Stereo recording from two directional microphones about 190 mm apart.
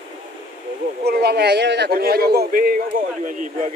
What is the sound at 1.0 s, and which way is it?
A man's voice, 55° right (ahead or behind).